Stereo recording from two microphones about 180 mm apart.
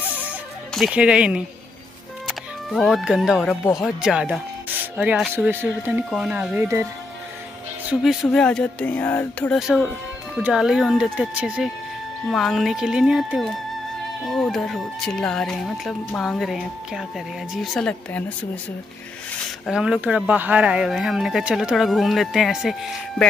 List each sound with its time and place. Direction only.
0.2 s music: 5° right (ahead or behind)
2.2 s speech: centre (ahead or behind)
7.9 s speech: centre (ahead or behind)
9.6 s speech: 5° right (ahead or behind)
19.6 s speech: 5° right (ahead or behind)